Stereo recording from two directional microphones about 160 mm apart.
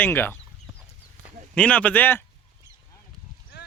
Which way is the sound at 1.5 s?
10° left (ahead or behind).